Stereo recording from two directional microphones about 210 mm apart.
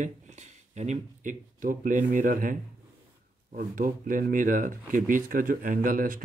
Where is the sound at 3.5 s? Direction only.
40° right (ahead or behind).